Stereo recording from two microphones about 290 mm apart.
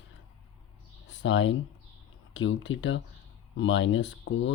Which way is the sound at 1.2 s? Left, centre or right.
Left.